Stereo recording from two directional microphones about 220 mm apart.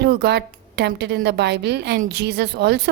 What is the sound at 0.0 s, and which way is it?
A woman's voice, 45° right (ahead or behind).